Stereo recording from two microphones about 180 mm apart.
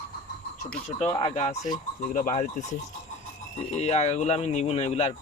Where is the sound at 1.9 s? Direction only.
45° left (ahead or behind).